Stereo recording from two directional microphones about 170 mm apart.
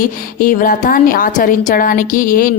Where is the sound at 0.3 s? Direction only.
55° left (ahead or behind).